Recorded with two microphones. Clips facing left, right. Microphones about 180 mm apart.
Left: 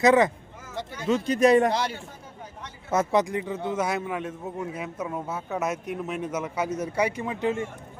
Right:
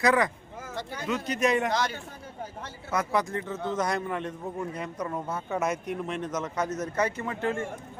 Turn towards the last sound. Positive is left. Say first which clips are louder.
# left 3 dB
turn(degrees=15)  # may be behind; listen again after turning